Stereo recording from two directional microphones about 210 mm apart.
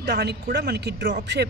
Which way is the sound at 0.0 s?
50° right (ahead or behind).